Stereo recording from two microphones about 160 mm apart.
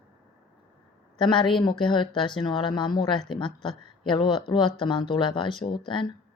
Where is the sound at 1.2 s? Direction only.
30° left (ahead or behind).